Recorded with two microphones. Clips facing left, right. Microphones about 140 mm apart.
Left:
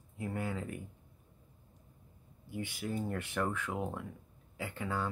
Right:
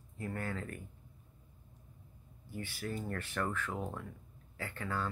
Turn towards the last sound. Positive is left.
turn(degrees=15)  # may be behind; listen again after turning